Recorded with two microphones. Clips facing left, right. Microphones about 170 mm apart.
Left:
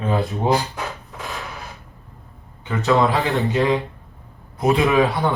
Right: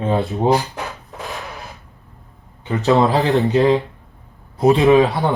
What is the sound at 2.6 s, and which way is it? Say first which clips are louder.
A man's voice: right 3 dB; 35° right (ahead or behind).